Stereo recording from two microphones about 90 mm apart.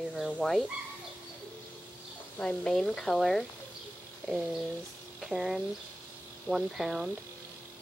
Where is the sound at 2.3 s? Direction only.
10° left (ahead or behind).